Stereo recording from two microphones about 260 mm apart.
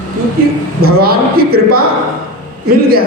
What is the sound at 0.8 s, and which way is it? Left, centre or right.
A man's voice, right.